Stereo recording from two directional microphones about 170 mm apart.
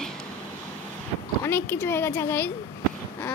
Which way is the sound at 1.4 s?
15° left (ahead or behind).